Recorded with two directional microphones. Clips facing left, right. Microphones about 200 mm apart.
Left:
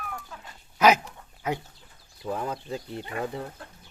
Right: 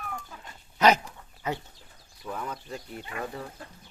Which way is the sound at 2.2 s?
30° left (ahead or behind).